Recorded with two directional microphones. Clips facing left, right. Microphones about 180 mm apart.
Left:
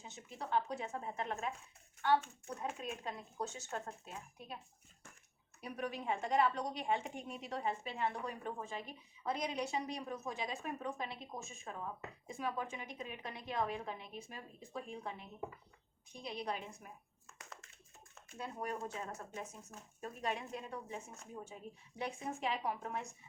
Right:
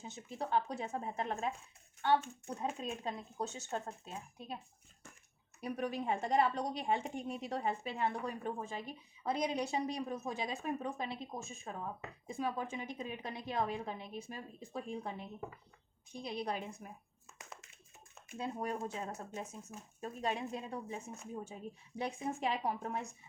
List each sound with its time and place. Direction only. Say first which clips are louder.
0.0 s a woman's voice: right 5 dB; 35° right (ahead or behind)
5.5 s a woman's voice: right 4 dB; 40° right (ahead or behind)
18.1 s a woman's voice: right 5 dB; 20° right (ahead or behind)